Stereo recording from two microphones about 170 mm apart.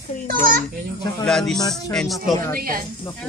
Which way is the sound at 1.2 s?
5° left (ahead or behind).